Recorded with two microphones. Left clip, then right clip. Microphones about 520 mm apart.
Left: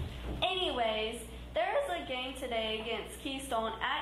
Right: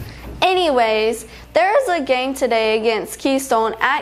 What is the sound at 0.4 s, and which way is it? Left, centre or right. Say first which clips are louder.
A woman's voice: right 17 dB; right.